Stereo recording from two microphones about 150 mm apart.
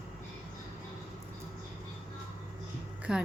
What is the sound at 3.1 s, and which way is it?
Speech, 5° right (ahead or behind).